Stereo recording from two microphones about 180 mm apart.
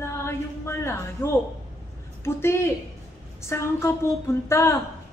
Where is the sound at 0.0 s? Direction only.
15° left (ahead or behind).